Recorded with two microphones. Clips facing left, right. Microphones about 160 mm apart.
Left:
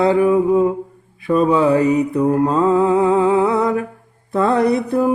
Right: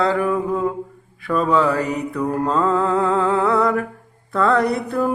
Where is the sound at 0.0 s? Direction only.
20° left (ahead or behind).